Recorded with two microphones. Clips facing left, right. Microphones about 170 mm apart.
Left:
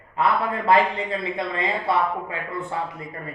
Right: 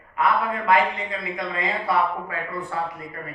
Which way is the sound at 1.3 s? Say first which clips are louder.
Left 2 dB; 25° left (ahead or behind).